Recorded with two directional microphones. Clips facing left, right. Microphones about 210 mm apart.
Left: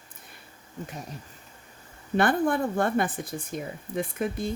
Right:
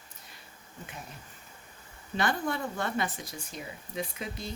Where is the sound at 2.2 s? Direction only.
55° left (ahead or behind).